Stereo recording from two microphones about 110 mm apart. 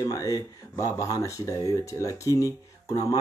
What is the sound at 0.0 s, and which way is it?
Speech, 35° left (ahead or behind).